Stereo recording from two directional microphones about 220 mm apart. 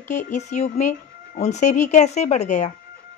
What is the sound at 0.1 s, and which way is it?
Speech, 35° left (ahead or behind).